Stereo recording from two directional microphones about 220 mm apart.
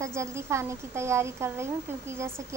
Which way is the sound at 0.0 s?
15° right (ahead or behind).